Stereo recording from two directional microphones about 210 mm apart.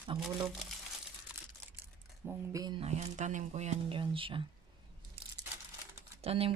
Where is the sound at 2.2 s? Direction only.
15° right (ahead or behind).